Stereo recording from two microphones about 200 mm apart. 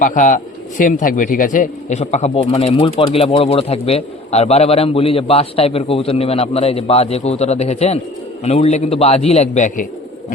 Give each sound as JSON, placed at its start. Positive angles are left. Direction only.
{"t": 0.0, "sound": "speech", "side_deg": 40}